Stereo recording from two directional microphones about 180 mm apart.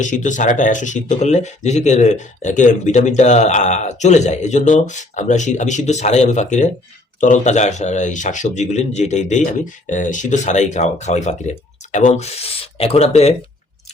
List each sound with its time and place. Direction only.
0.0 s speech: 45° left (ahead or behind)